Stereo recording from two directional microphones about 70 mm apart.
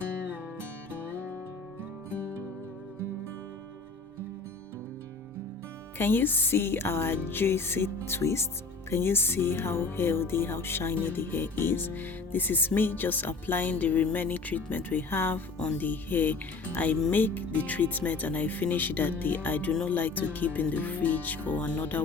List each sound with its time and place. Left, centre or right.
6.0 s speech: left